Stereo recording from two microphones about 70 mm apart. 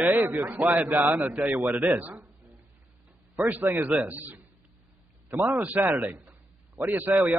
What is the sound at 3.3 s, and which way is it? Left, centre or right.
A man's voice, right.